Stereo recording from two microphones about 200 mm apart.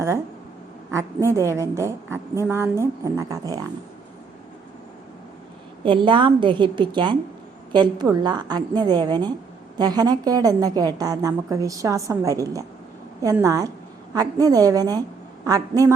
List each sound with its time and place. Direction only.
0.9 s a woman's voice: 15° right (ahead or behind)
5.8 s a woman's voice: 25° right (ahead or behind)